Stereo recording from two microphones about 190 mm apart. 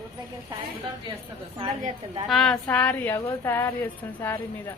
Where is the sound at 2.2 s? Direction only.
Centre (ahead or behind).